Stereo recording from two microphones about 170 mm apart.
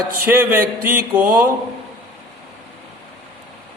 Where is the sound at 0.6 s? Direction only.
60° right (ahead or behind).